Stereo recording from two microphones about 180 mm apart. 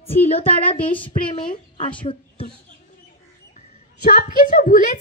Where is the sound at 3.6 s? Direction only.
45° left (ahead or behind).